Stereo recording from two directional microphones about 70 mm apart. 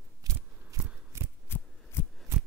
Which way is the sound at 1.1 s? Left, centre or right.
Right.